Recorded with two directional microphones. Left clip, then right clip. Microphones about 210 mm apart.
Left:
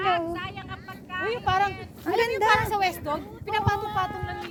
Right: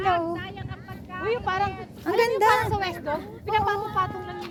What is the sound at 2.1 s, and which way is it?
Speech, 10° right (ahead or behind).